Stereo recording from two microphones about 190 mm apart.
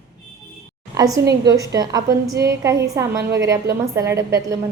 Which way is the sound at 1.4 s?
15° right (ahead or behind).